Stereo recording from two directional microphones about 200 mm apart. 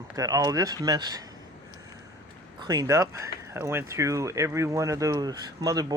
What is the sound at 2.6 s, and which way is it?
Speech, 20° right (ahead or behind).